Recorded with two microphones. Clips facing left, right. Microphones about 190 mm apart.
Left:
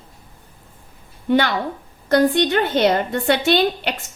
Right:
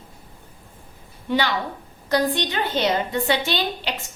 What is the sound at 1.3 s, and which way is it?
A woman's voice, 55° left (ahead or behind).